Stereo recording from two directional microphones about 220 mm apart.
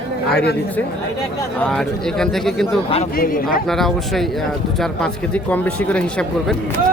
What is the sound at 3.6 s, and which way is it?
Speech, centre (ahead or behind).